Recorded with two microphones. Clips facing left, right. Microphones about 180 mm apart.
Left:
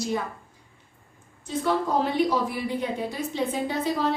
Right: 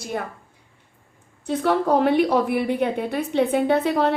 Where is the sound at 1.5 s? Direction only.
65° right (ahead or behind).